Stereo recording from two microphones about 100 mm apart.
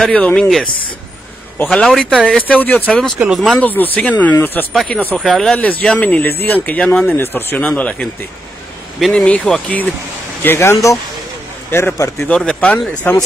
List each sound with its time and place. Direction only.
0.1 s speech: 10° left (ahead or behind)
0.7 s speech: 55° left (ahead or behind)
1.7 s speech: 10° left (ahead or behind)
3.2 s speech: 5° right (ahead or behind)
3.5 s speech: 15° left (ahead or behind); by 5.5 s centre (ahead or behind)
5.5 s speech: 15° left (ahead or behind)
9.1 s speech: 10° left (ahead or behind)
10.4 s speech: 25° left (ahead or behind)
12.3 s speech: 10° left (ahead or behind)